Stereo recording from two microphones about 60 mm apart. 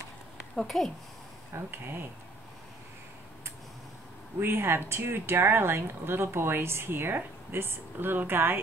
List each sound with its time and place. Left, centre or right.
0.6 s a woman's voice: centre
1.5 s speech: right
4.4 s speech: right